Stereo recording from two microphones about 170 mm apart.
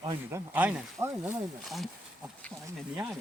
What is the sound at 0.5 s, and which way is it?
Speech, 10° right (ahead or behind).